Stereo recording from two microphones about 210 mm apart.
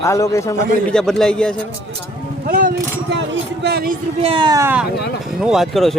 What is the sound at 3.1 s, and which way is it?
Speech, 55° right (ahead or behind).